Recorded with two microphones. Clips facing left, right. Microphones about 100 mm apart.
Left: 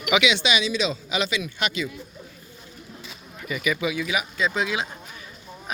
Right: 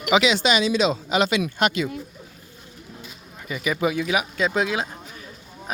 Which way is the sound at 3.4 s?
30° right (ahead or behind).